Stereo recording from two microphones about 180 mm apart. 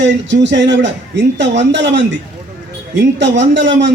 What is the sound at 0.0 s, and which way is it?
A man's voice, 80° right.